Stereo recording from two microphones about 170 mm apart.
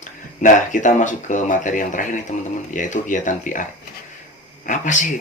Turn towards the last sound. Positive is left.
turn(degrees=50)  # may be behind; listen again after turning